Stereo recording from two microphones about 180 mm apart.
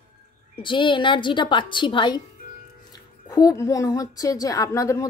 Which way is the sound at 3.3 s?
20° left (ahead or behind).